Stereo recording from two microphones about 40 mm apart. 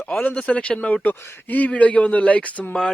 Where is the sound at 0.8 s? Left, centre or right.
Left.